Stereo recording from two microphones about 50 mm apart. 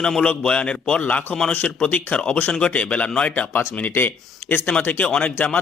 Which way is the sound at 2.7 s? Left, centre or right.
Left.